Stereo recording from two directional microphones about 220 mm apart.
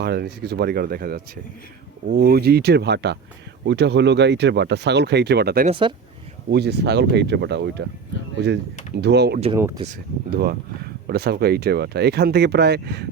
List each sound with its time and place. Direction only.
0.0 s speech: 45° right (ahead or behind)
5.6 s speech: 25° right (ahead or behind)
6.5 s speech: 50° right (ahead or behind)
9.0 s speech: 50° right (ahead or behind)
9.6 s speech: 10° right (ahead or behind)
9.8 s speech: 40° right (ahead or behind)